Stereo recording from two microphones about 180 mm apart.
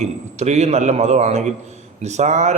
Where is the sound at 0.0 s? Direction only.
40° right (ahead or behind).